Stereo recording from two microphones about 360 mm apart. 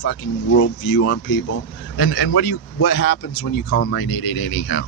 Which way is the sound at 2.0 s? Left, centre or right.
Left.